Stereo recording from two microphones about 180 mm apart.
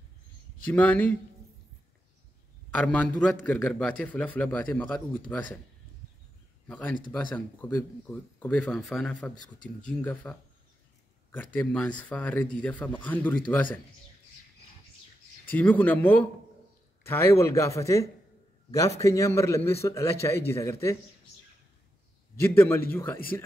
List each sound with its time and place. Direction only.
0.7 s speech: 10° left (ahead or behind)
2.7 s a man's voice: 5° left (ahead or behind)
6.7 s speech: 10° left (ahead or behind)
11.3 s speech: 10° left (ahead or behind)
15.5 s speech: 10° left (ahead or behind)
22.6 s speech: 10° left (ahead or behind)